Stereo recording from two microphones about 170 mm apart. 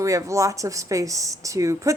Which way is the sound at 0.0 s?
20° right (ahead or behind).